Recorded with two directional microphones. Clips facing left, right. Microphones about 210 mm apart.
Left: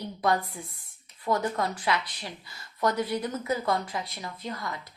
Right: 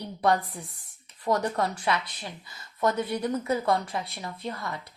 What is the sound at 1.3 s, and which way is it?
Speech, 30° right (ahead or behind).